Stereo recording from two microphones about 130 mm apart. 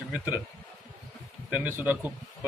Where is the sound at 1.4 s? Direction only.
15° right (ahead or behind).